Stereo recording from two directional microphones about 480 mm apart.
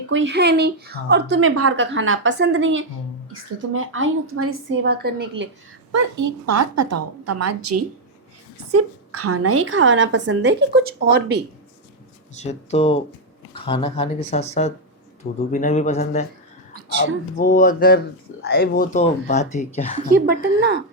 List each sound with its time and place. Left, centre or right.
0.1 s a woman's voice: right
5.9 s a woman's voice: right; by 11.4 s centre
12.3 s speech: centre
17.3 s speech: centre
20.1 s a woman's voice: centre